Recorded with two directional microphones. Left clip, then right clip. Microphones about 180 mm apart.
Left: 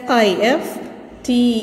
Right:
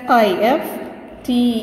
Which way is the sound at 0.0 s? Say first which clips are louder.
Right 1 dB; 35° left (ahead or behind).